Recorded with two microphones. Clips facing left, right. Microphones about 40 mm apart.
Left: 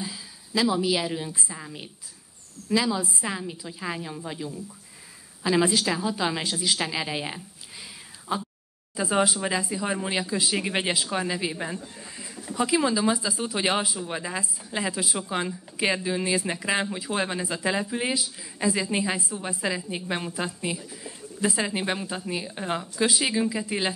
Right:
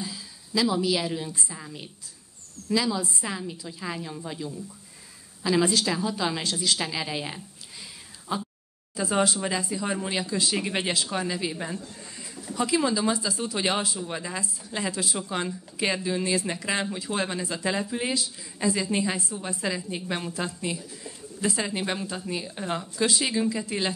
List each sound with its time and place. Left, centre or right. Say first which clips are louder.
0.0 s a woman's voice: even; centre
8.9 s speech: left 1 dB; centre